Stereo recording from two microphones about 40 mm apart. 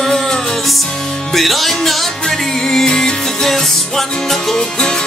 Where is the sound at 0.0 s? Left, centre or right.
Centre.